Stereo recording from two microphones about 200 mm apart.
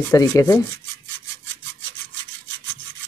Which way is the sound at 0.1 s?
15° left (ahead or behind).